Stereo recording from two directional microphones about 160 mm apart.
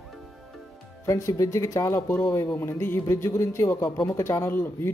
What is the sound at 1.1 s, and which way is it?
Speech, 20° left (ahead or behind).